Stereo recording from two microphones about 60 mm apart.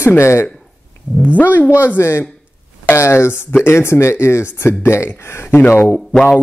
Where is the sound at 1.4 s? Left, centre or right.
Left.